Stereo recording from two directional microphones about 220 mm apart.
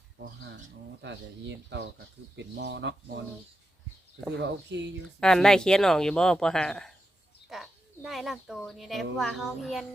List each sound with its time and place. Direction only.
1.0 s speech: 50° right (ahead or behind)
4.4 s speech: 50° right (ahead or behind)
5.2 s speech: 5° left (ahead or behind)